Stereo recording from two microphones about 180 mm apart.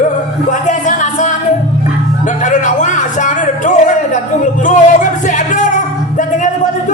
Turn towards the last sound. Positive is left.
turn(degrees=45)  # may be behind; listen again after turning